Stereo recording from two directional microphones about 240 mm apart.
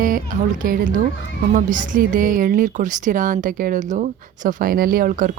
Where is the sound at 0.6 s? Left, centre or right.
Right.